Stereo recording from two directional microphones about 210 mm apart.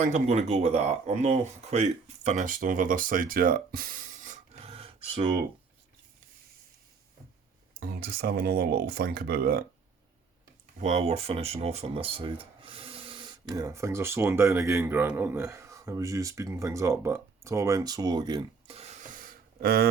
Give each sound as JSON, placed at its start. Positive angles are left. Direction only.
{"t": 0.0, "sound": "speech", "side_deg": -30}
{"t": 4.6, "sound": "a sound", "side_deg": -25}
{"t": 7.8, "sound": "speech", "side_deg": -45}
{"t": 10.8, "sound": "speech", "side_deg": -30}